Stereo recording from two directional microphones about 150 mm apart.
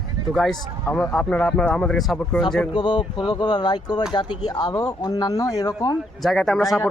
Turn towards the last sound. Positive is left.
turn(degrees=0)  # may be behind; listen again after turning